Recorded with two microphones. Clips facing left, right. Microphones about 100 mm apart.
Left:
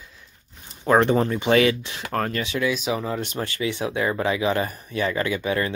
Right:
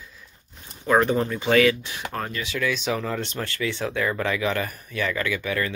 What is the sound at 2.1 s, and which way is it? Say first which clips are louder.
Speech: left 6 dB; 55° left (ahead or behind).